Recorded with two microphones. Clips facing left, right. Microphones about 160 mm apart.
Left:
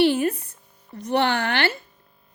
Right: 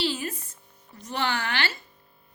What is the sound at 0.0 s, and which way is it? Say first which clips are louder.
Speech: left 10 dB; 60° left (ahead or behind).